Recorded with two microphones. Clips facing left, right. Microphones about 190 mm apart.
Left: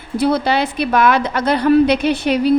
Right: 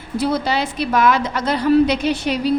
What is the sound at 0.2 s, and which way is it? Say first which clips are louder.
A woman's voice: left 4 dB; 60° left (ahead or behind).